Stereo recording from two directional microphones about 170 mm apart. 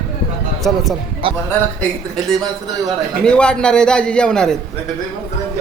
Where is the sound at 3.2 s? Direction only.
5° left (ahead or behind).